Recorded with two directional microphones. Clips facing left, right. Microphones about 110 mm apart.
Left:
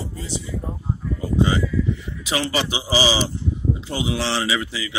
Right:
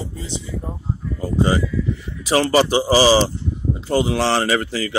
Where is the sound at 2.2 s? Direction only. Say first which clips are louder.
Right 8 dB; 45° right (ahead or behind).